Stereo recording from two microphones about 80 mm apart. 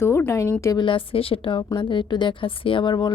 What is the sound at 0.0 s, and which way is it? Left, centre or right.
Speech, left.